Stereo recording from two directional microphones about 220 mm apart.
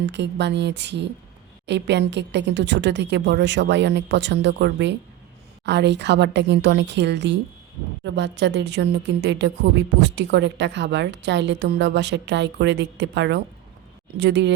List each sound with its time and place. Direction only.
0.0 s a woman's voice: 50° right (ahead or behind)